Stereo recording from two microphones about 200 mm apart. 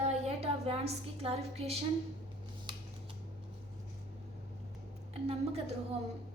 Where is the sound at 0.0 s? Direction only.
30° right (ahead or behind).